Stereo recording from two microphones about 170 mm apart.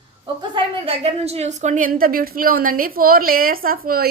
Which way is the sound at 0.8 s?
35° right (ahead or behind).